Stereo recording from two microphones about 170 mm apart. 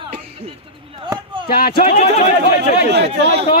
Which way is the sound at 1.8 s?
40° left (ahead or behind).